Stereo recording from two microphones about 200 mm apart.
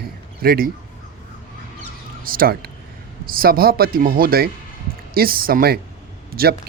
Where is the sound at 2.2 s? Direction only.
45° right (ahead or behind).